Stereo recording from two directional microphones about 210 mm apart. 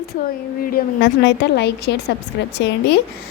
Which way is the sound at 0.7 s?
55° left (ahead or behind).